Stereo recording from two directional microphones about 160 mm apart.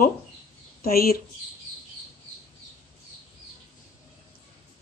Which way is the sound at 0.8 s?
70° left (ahead or behind).